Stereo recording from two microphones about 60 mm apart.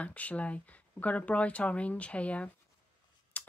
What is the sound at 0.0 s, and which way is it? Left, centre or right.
Speech, left.